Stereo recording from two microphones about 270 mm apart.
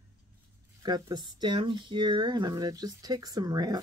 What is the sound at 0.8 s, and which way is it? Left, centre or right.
Speech, centre.